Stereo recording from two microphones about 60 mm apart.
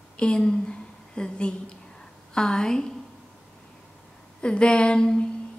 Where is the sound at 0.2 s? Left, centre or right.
Centre.